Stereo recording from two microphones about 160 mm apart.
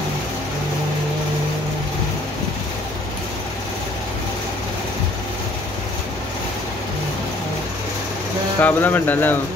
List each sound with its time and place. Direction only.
8.5 s speech: 10° left (ahead or behind)